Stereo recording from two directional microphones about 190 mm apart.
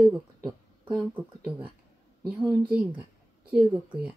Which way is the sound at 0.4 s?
20° right (ahead or behind).